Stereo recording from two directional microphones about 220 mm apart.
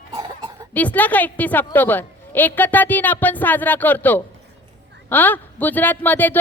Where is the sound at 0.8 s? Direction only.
5° left (ahead or behind).